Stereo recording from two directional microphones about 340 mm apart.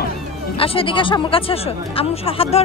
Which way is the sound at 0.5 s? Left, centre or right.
Centre.